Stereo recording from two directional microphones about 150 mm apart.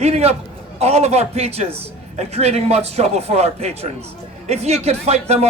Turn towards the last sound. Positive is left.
turn(degrees=-45)  # may be behind; listen again after turning